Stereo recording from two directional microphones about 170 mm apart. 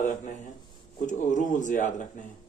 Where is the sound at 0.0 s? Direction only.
45° left (ahead or behind).